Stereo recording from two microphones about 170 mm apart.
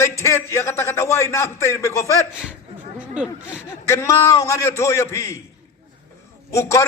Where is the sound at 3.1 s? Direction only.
5° right (ahead or behind).